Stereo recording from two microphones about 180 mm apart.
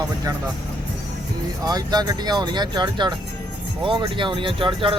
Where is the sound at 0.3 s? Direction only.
20° right (ahead or behind).